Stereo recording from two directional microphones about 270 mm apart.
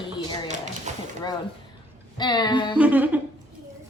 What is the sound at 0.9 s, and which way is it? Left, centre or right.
Speech, right.